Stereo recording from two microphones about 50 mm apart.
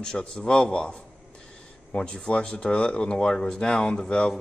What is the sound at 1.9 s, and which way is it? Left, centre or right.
Speech, centre.